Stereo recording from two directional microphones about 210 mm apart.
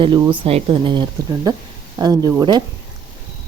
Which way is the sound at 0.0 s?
25° right (ahead or behind).